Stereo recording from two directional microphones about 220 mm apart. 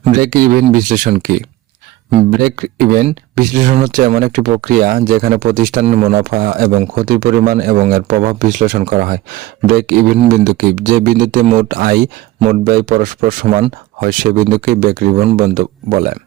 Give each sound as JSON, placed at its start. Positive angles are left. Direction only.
{"t": 0.0, "sound": "speech", "side_deg": -40}